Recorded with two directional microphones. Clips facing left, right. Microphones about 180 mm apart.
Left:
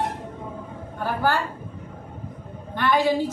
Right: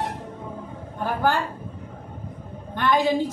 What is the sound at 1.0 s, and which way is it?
Speech, 15° right (ahead or behind).